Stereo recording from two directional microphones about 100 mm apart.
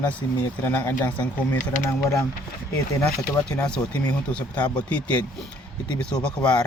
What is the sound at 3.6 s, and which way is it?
Speech, 10° left (ahead or behind).